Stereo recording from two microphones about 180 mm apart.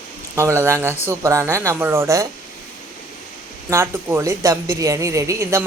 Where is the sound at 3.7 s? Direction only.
15° right (ahead or behind).